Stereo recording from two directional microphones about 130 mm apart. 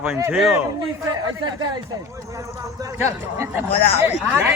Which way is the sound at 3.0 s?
20° right (ahead or behind).